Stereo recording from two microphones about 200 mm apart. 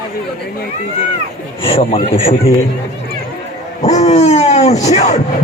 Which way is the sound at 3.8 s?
35° left (ahead or behind).